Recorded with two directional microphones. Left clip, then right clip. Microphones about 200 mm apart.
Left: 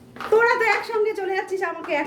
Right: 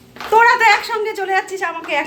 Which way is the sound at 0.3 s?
5° left (ahead or behind).